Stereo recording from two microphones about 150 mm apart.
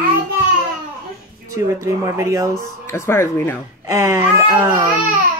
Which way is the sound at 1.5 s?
20° right (ahead or behind).